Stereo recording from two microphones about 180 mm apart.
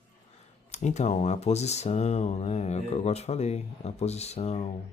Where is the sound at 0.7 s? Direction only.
40° left (ahead or behind).